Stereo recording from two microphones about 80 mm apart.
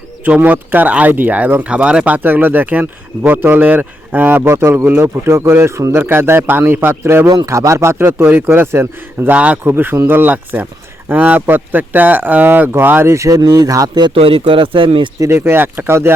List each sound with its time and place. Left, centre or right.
0.3 s speech: centre
7.4 s a man's voice: right
9.3 s speech: centre
9.6 s speech: right
15.3 s speech: right